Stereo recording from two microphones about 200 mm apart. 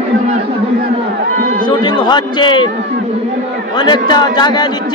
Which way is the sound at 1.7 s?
20° left (ahead or behind).